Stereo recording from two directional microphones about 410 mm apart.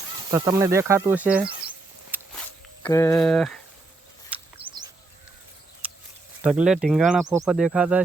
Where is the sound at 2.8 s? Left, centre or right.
Centre.